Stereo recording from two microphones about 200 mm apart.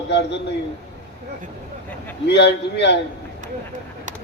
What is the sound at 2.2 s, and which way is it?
Speech, 60° left (ahead or behind).